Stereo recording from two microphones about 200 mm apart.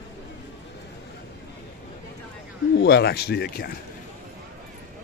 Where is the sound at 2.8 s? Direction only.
50° left (ahead or behind).